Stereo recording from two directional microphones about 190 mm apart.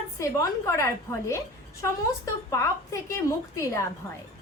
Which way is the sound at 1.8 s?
15° left (ahead or behind).